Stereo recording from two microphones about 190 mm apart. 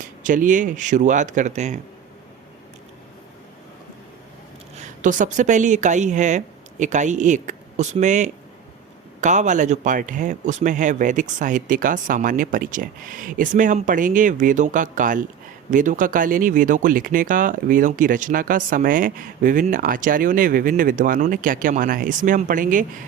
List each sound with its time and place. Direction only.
0.2 s speech: 45° right (ahead or behind)
4.8 s speech: 40° right (ahead or behind)